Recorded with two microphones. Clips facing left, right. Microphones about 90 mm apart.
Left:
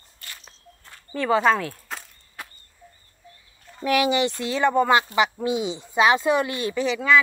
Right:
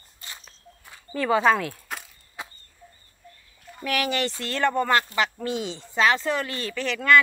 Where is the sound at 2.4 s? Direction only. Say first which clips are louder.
Right 2 dB; 20° right (ahead or behind).